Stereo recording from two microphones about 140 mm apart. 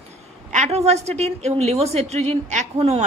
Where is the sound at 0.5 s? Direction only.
50° right (ahead or behind).